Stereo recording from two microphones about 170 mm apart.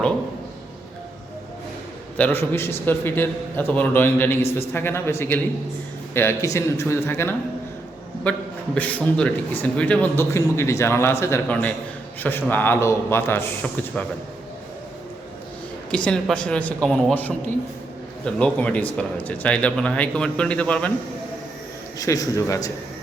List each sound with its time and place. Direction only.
2.1 s a man's voice: 10° left (ahead or behind)
16.0 s speech: 5° left (ahead or behind)
18.3 s speech: 5° left (ahead or behind)
21.9 s a man's voice: 20° left (ahead or behind)